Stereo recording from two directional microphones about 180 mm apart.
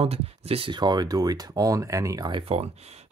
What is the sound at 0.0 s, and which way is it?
Speech, 35° right (ahead or behind).